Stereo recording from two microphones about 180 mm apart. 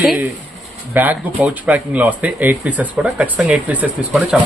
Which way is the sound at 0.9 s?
10° right (ahead or behind).